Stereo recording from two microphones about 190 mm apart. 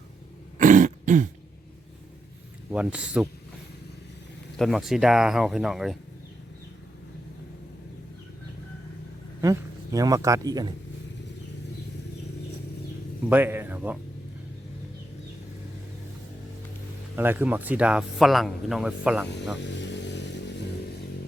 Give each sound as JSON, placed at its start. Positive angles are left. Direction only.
{"t": 0.6, "sound": "throat clearing", "side_deg": -40}
{"t": 2.6, "sound": "speech", "side_deg": -5}
{"t": 4.5, "sound": "speech", "side_deg": 0}
{"t": 9.4, "sound": "a man's voice", "side_deg": -20}
{"t": 13.3, "sound": "speech", "side_deg": -10}
{"t": 17.2, "sound": "speech", "side_deg": -10}
{"t": 19.6, "sound": "vehicle", "side_deg": 70}